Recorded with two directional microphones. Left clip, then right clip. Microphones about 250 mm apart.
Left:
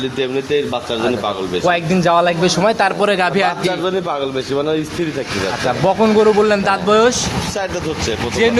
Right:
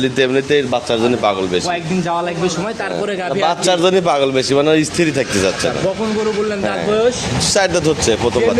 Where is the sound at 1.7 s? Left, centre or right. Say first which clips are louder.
Left 5 dB; left.